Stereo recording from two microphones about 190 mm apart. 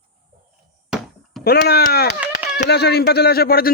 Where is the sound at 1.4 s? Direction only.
55° left (ahead or behind).